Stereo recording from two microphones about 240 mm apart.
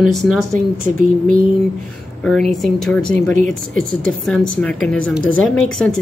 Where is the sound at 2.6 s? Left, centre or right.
Centre.